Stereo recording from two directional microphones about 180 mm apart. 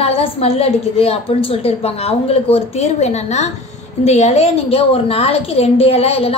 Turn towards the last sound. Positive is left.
turn(degrees=35)  # may be behind; listen again after turning